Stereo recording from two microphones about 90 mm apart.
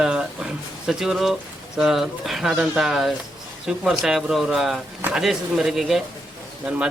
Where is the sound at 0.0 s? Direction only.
10° right (ahead or behind).